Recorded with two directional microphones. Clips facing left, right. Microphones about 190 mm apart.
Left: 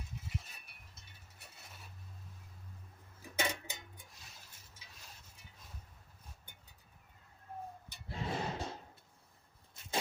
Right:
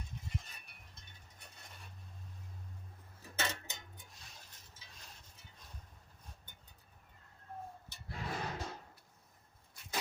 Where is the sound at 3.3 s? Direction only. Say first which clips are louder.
Left 3 dB; 10° left (ahead or behind).